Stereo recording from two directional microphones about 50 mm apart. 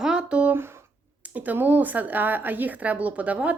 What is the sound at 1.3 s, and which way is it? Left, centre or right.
A woman's voice, right.